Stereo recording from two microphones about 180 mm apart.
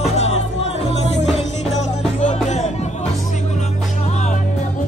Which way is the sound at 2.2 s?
40° left (ahead or behind).